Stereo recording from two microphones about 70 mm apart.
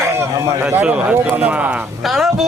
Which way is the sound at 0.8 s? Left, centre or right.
Centre.